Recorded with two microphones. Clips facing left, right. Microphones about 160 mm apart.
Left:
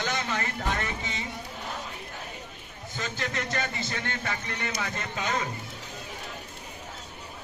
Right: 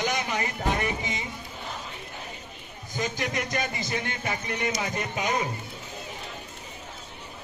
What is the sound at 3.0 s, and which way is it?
Speech, 15° right (ahead or behind).